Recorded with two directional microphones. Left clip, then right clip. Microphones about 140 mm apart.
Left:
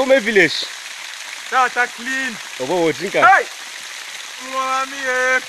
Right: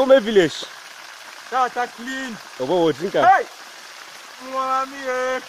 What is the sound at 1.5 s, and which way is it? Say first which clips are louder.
Speech: left 5 dB; 15° right (ahead or behind).